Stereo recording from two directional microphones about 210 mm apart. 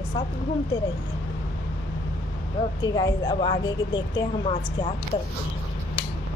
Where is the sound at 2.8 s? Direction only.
20° left (ahead or behind).